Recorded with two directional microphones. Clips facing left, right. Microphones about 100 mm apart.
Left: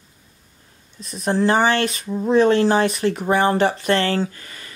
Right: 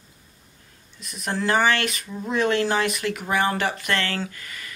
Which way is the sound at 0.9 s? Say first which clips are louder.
Left 7 dB; 35° left (ahead or behind).